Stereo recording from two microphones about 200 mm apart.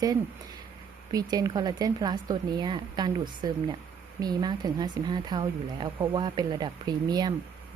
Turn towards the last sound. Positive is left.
turn(degrees=-20)  # may be behind; listen again after turning